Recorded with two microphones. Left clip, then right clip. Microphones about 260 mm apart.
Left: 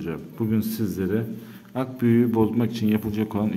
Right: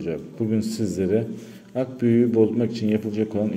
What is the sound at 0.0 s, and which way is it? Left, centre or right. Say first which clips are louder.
Speech: right 2 dB; centre.